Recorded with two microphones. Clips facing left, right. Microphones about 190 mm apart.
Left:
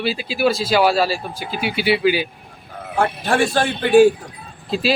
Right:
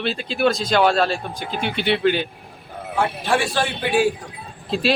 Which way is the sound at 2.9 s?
45° left (ahead or behind).